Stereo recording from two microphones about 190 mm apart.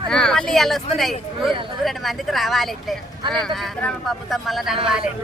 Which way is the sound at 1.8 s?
Centre (ahead or behind).